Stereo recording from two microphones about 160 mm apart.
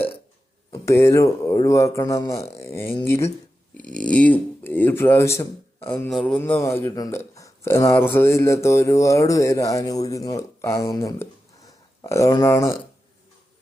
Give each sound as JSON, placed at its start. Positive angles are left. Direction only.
{"t": 0.7, "sound": "speech", "side_deg": 15}